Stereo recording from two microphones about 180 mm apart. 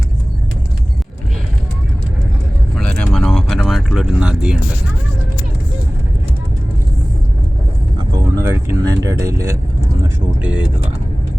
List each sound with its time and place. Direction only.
2.7 s vehicle: 5° left (ahead or behind)
8.1 s vehicle: 20° right (ahead or behind)